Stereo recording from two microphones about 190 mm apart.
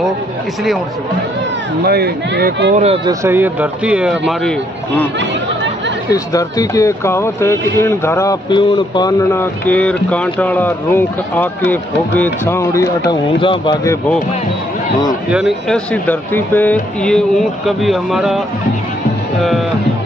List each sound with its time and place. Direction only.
1.9 s speech: 55° right (ahead or behind)
2.7 s speech: 35° right (ahead or behind)
3.1 s speech: 10° right (ahead or behind)
6.1 s speech: 20° left (ahead or behind)
13.1 s speech: 25° left (ahead or behind)
13.8 s speech: 10° left (ahead or behind)
15.2 s speech: centre (ahead or behind)